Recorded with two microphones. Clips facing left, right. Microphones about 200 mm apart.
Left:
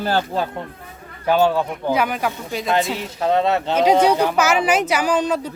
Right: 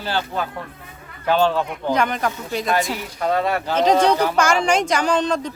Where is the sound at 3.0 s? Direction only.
25° left (ahead or behind).